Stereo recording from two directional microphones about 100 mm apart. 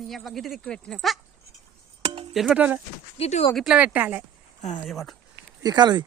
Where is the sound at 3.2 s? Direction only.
90° left.